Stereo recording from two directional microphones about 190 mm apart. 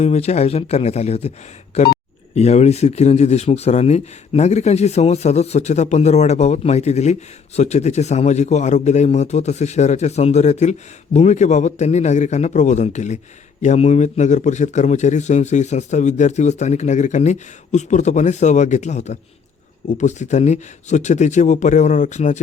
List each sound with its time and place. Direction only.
0.0 s speech: 35° left (ahead or behind)